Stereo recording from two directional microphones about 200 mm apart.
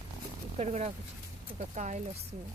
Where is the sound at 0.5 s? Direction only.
35° right (ahead or behind).